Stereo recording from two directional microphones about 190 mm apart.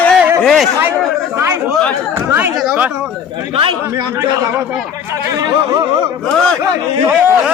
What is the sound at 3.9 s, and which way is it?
Speech, 15° right (ahead or behind).